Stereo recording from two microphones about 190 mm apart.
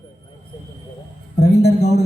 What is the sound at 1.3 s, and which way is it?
Speech, 60° left (ahead or behind).